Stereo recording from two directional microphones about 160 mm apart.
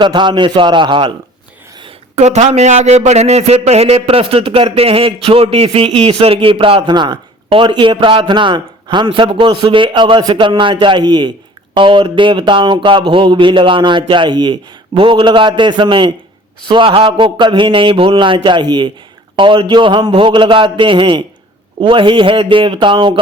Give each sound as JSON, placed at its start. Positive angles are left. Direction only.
{"t": 0.0, "sound": "a man's voice", "side_deg": -30}
{"t": 1.8, "sound": "speech", "side_deg": -45}